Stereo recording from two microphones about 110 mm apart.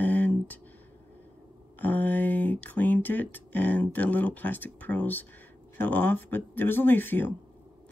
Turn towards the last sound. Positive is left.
turn(degrees=20)  # may be behind; listen again after turning